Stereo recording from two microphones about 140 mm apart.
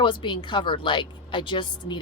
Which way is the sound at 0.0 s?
35° left (ahead or behind).